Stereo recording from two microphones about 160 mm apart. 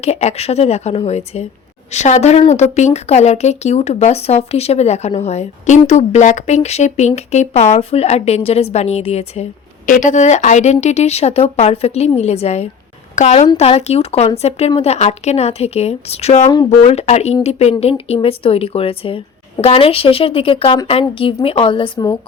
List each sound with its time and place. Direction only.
0.0 s a woman's voice: 45° left (ahead or behind)